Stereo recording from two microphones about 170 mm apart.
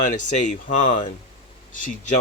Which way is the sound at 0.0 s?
45° left (ahead or behind).